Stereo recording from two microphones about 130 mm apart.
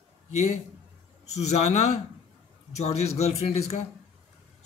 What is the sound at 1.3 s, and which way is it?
A man's voice, 60° left (ahead or behind).